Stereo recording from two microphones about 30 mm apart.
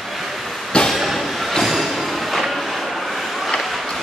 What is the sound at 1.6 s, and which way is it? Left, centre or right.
Music, centre.